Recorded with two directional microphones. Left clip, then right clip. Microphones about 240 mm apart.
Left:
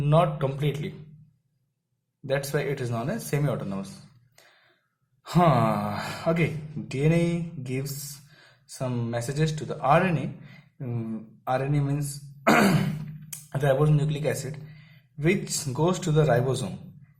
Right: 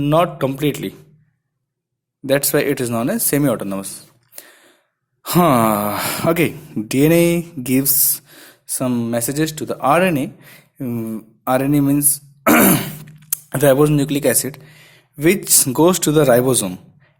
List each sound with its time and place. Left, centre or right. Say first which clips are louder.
0.0 s a man's voice: right 8 dB; right
2.2 s a man's voice: right 11 dB; right
4.4 s a sound: right 13 dB; right
5.2 s a man's voice: right 8 dB; right